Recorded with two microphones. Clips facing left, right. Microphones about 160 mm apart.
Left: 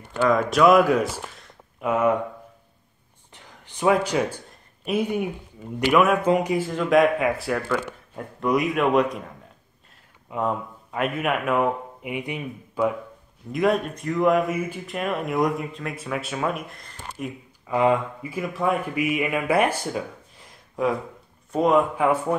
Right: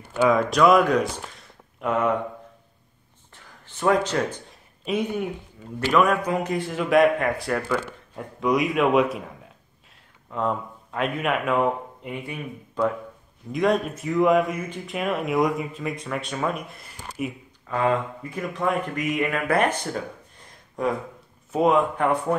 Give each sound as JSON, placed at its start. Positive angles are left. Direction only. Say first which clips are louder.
{"t": 0.2, "sound": "speech", "louder": "even", "side_deg": 0}
{"t": 3.6, "sound": "speech", "louder": "left 1 dB", "side_deg": 10}
{"t": 6.4, "sound": "speech", "louder": "left 2 dB", "side_deg": 5}
{"t": 10.3, "sound": "a man's voice", "louder": "even", "side_deg": 5}
{"t": 17.6, "sound": "speech", "louder": "left 3 dB", "side_deg": 15}
{"t": 21.5, "sound": "speech", "louder": "even", "side_deg": 0}